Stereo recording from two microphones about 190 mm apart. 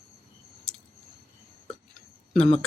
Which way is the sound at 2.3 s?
35° left (ahead or behind).